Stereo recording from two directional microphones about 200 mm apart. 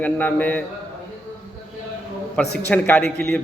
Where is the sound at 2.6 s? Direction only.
10° left (ahead or behind).